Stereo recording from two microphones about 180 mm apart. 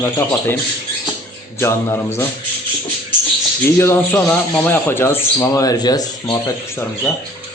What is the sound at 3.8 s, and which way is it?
A man's voice, 10° left (ahead or behind).